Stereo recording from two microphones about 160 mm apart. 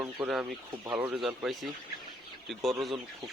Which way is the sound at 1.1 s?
5° right (ahead or behind).